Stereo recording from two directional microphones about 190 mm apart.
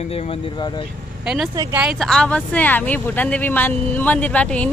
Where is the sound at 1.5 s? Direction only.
20° right (ahead or behind).